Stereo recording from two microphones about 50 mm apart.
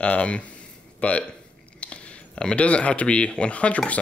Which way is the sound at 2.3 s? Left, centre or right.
Left.